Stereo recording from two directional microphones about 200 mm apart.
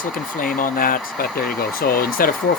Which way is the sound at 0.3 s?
45° left (ahead or behind).